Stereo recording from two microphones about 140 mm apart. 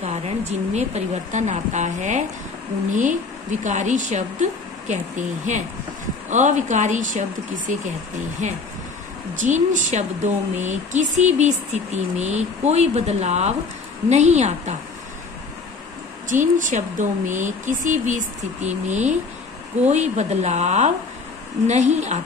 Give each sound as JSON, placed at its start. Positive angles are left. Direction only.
{"t": 0.7, "sound": "speech", "side_deg": -55}
{"t": 16.3, "sound": "speech", "side_deg": -65}